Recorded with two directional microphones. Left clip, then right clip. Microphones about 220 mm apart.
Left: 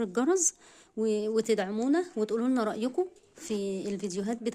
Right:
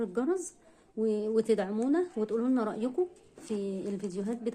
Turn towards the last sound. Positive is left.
turn(degrees=45)  # may be behind; listen again after turning